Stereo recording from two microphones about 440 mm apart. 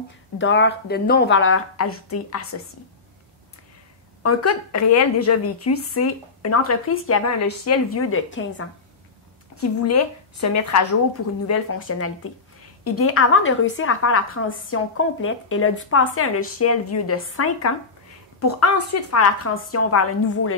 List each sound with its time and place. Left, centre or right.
0.4 s a woman's voice: left
4.2 s a woman's voice: left